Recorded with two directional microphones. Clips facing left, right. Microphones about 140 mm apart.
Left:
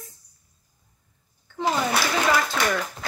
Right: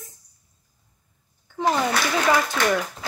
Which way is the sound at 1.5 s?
10° right (ahead or behind).